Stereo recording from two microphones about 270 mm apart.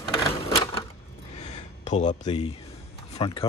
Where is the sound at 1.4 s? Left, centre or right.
Left.